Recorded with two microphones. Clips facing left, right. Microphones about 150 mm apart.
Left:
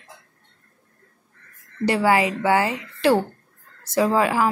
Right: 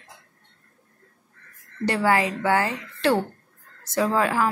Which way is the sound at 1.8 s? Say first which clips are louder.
Left 3 dB; 10° left (ahead or behind).